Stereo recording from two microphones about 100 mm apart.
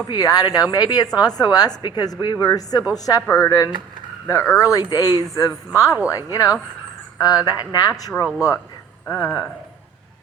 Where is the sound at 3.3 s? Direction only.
25° left (ahead or behind).